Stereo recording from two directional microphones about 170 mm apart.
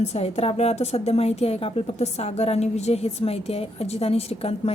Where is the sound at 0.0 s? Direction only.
40° left (ahead or behind).